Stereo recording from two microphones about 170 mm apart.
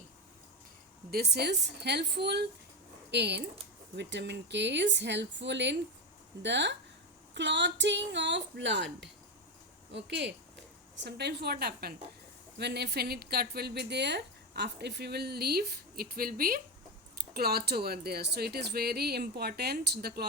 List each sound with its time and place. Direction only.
1.1 s speech: 70° right (ahead or behind)
3.1 s speech: 85° right; by 11.9 s 65° right (ahead or behind)
12.5 s speech: 75° right (ahead or behind)